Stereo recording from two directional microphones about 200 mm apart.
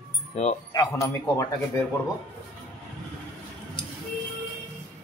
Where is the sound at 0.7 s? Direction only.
20° left (ahead or behind).